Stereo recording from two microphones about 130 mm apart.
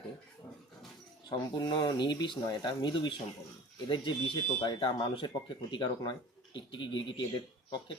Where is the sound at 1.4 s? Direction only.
35° left (ahead or behind).